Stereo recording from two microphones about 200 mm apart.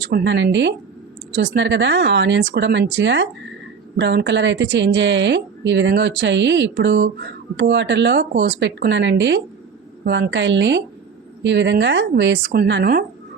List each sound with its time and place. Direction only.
0.0 s a woman's voice: 60° right (ahead or behind)